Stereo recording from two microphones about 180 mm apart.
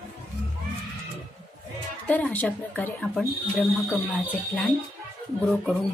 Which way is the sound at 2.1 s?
10° left (ahead or behind).